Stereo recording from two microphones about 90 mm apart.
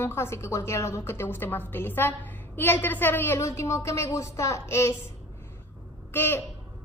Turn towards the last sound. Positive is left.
turn(degrees=20)  # may be behind; listen again after turning